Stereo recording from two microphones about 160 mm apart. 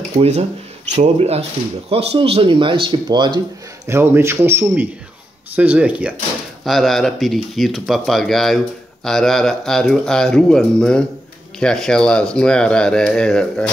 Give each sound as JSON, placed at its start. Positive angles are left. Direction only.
{"t": 0.2, "sound": "speech", "side_deg": -40}
{"t": 3.8, "sound": "speech", "side_deg": -15}